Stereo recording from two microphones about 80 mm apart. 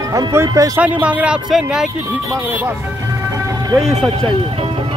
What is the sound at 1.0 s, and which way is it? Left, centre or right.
Music, centre.